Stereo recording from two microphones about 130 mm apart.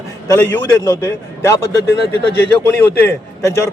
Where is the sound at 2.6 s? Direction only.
15° left (ahead or behind).